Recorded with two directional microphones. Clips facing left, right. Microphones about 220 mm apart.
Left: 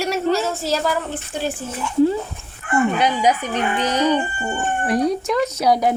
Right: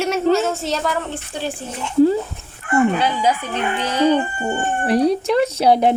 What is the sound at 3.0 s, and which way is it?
Speech, 15° left (ahead or behind).